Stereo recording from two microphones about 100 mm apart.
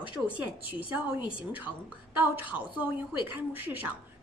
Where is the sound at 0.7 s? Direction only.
15° right (ahead or behind).